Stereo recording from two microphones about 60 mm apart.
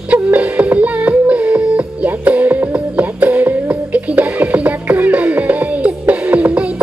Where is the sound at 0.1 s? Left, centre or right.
Right.